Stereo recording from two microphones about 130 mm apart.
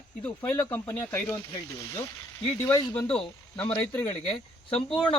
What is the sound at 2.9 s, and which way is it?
Speech, 10° left (ahead or behind).